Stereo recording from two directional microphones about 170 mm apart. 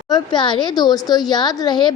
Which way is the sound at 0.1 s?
25° left (ahead or behind).